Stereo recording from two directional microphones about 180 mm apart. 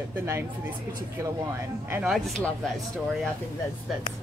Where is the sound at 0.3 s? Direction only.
10° right (ahead or behind).